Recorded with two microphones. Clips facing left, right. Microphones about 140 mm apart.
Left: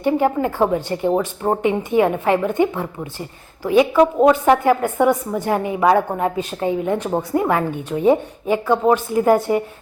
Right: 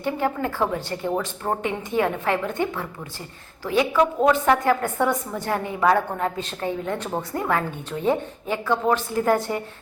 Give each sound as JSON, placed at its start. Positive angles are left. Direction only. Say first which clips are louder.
{"t": 0.0, "sound": "a woman's voice", "louder": "left 7 dB", "side_deg": 15}